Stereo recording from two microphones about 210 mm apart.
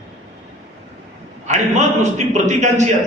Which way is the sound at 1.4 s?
35° right (ahead or behind).